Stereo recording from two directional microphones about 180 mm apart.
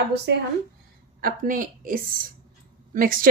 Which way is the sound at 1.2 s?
50° right (ahead or behind).